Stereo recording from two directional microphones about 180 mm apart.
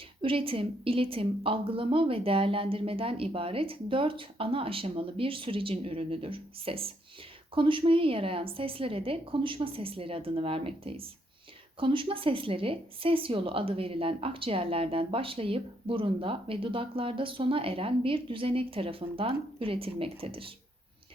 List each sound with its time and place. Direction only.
0.2 s a woman's voice: 30° right (ahead or behind)